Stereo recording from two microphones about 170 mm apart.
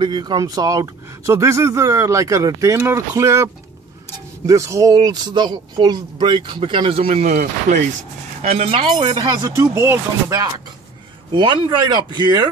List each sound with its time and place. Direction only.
0.0 s speech: 25° right (ahead or behind)
4.5 s speech: 20° right (ahead or behind); by 7.3 s 40° right (ahead or behind)
8.4 s speech: 35° right (ahead or behind); by 10.5 s 15° right (ahead or behind)
11.3 s speech: 25° right (ahead or behind)